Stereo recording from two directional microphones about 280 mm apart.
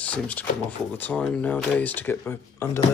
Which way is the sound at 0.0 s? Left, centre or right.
Centre.